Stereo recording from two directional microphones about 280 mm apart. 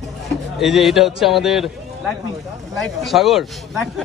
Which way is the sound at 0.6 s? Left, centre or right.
Centre.